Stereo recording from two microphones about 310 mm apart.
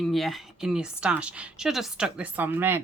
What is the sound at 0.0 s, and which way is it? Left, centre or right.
A woman's voice, centre.